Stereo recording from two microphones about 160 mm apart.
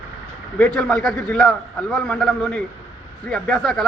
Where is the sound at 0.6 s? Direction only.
5° left (ahead or behind).